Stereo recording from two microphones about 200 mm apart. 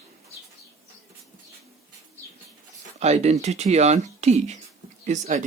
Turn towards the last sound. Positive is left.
turn(degrees=-35)  # may be behind; listen again after turning